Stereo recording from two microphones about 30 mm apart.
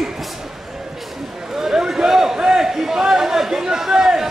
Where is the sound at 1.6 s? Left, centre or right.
Right.